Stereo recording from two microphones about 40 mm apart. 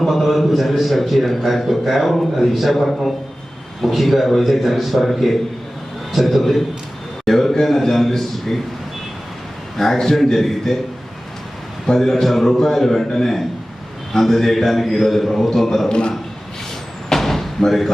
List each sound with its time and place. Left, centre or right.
0.1 s a man's voice: centre
9.7 s a man's voice: centre
11.9 s a man's voice: centre
15.9 s a man's voice: left
17.1 s a sound: centre
17.7 s a man's voice: centre